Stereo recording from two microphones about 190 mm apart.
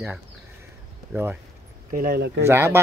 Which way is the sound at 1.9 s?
55° right (ahead or behind).